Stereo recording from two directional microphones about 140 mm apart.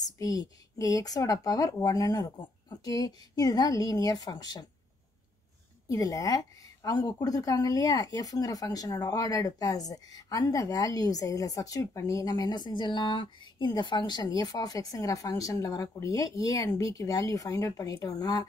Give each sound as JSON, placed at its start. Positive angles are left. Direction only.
{"t": 0.0, "sound": "a woman's voice", "side_deg": 25}
{"t": 5.9, "sound": "a woman's voice", "side_deg": 25}